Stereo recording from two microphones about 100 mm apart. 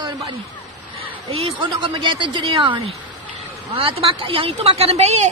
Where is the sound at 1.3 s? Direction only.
60° right (ahead or behind).